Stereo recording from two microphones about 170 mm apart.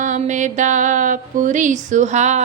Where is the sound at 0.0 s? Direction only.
45° right (ahead or behind).